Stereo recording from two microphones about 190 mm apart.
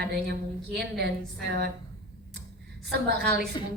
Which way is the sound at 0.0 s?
55° right (ahead or behind).